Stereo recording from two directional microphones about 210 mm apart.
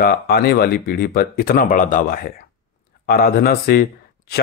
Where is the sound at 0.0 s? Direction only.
45° left (ahead or behind).